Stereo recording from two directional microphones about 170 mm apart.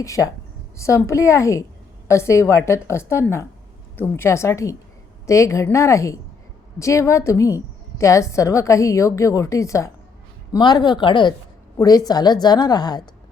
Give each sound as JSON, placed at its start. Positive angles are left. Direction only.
{"t": 0.0, "sound": "a woman's voice", "side_deg": 20}